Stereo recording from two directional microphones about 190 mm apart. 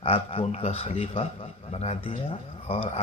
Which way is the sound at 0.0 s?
30° left (ahead or behind).